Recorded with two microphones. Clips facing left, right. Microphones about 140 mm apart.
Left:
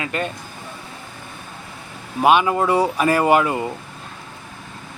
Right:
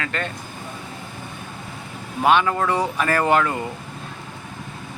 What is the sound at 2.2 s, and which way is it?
Speech, 15° left (ahead or behind).